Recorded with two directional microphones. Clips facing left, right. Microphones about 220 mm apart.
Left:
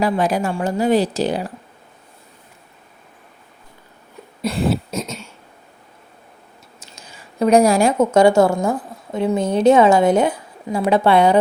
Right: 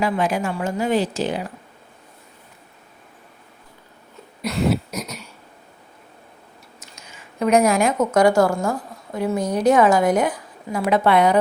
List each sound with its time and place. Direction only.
0.0 s speech: 35° left (ahead or behind)
4.4 s a sound: 30° left (ahead or behind)
6.8 s a woman's voice: 30° left (ahead or behind)